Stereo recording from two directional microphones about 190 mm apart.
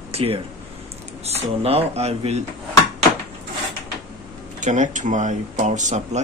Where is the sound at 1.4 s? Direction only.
30° right (ahead or behind).